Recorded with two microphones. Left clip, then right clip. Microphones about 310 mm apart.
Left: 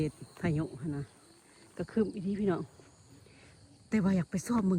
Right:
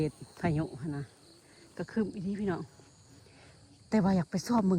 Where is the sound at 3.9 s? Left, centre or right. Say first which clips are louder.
Right 3 dB; centre.